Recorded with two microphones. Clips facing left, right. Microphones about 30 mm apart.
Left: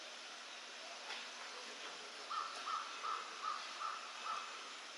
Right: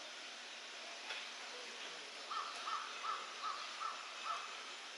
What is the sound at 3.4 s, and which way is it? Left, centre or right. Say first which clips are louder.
Crow: left 1 dB; right.